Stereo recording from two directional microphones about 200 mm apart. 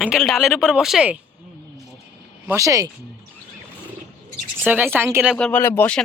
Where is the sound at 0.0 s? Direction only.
Centre (ahead or behind).